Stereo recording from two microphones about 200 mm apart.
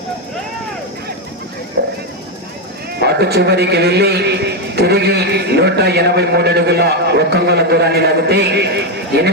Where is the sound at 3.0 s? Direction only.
55° right (ahead or behind).